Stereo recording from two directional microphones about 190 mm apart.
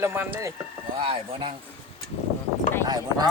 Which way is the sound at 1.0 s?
30° right (ahead or behind).